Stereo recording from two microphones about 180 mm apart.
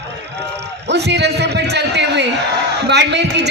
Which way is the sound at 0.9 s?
70° right (ahead or behind).